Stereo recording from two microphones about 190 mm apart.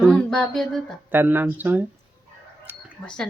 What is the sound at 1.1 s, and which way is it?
Speech, 10° right (ahead or behind).